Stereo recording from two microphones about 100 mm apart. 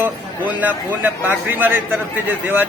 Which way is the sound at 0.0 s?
20° right (ahead or behind).